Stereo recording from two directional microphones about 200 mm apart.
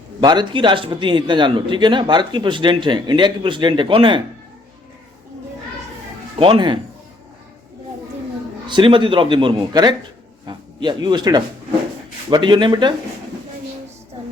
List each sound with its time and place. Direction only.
0.2 s a man's voice: 20° right (ahead or behind)
6.4 s a man's voice: 25° right (ahead or behind)
8.6 s a man's voice: 25° right (ahead or behind)